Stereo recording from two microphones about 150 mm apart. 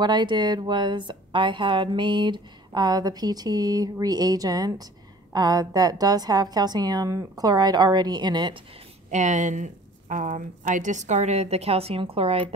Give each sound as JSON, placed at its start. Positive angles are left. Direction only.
{"t": 0.0, "sound": "speech", "side_deg": -30}
{"t": 9.1, "sound": "a woman's voice", "side_deg": -55}